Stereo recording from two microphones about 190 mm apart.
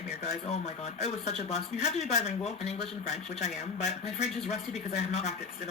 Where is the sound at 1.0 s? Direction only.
35° left (ahead or behind).